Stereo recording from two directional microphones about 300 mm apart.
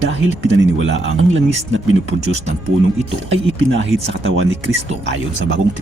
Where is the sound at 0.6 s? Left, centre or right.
Right.